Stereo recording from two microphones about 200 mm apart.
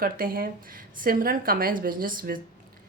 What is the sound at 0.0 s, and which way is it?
Speech, 45° right (ahead or behind).